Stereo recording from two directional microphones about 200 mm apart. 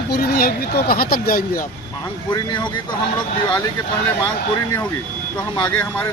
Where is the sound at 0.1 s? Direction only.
50° left (ahead or behind).